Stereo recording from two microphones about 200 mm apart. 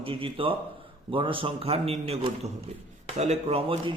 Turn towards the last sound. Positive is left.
turn(degrees=-25)  # may be behind; listen again after turning